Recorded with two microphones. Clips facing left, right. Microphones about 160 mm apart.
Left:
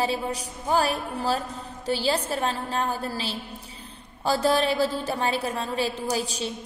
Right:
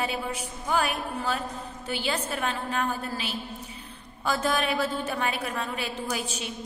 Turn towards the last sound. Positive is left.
turn(degrees=35)  # may be behind; listen again after turning